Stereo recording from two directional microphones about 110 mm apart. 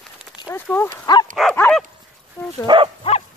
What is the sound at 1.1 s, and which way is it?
Speech, 40° left (ahead or behind).